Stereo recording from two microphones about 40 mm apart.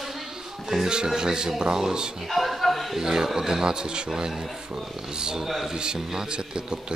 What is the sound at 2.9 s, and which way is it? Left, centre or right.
A man's voice, centre.